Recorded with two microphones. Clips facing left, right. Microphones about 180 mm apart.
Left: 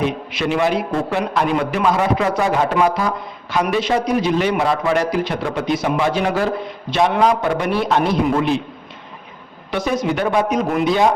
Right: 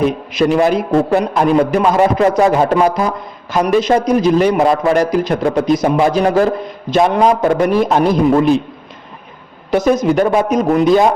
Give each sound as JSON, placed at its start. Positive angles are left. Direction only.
{"t": 0.0, "sound": "a man's voice", "side_deg": -40}
{"t": 9.7, "sound": "a man's voice", "side_deg": -45}